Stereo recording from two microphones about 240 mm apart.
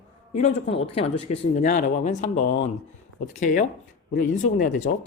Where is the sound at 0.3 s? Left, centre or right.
Left.